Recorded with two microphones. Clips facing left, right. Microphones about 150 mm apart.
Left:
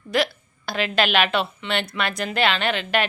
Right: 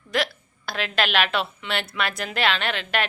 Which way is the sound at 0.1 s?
Centre (ahead or behind).